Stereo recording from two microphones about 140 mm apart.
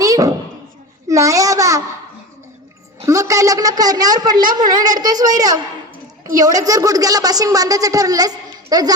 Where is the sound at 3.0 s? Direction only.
20° right (ahead or behind).